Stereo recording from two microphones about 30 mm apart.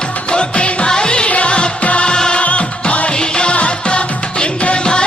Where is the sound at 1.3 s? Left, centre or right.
Left.